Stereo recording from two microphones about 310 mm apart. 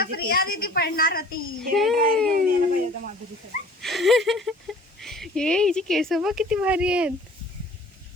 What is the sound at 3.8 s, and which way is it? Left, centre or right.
Speech, centre.